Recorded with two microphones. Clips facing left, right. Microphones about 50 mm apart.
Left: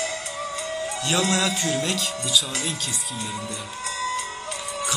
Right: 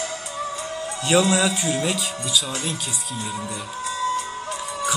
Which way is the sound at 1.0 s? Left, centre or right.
Centre.